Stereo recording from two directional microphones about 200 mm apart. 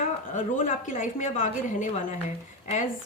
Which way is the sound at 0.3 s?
40° left (ahead or behind).